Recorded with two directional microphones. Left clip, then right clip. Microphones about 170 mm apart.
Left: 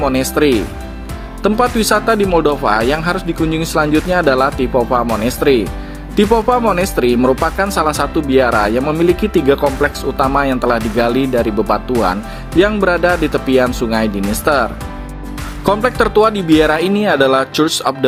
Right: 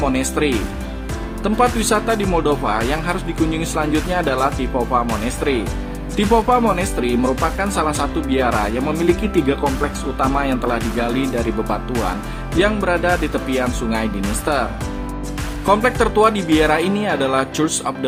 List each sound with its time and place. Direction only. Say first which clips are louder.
0.0 s speech: left 5 dB; 35° left (ahead or behind)
12.5 s speech: left 5 dB; 35° left (ahead or behind)